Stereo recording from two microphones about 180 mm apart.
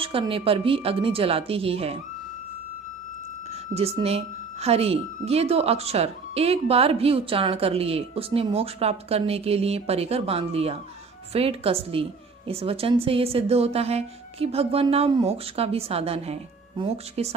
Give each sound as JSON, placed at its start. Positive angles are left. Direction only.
{"t": 0.0, "sound": "speech", "side_deg": -30}
{"t": 3.7, "sound": "speech", "side_deg": -35}